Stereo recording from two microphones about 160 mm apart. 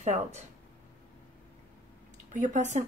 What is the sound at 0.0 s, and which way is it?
Speech, 45° right (ahead or behind).